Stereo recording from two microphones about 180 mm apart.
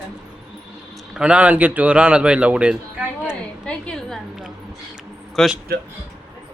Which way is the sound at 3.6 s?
5° left (ahead or behind).